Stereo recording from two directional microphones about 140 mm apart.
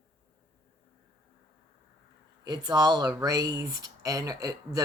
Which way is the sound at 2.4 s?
30° right (ahead or behind).